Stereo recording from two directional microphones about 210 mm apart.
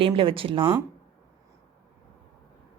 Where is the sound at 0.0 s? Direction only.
25° right (ahead or behind).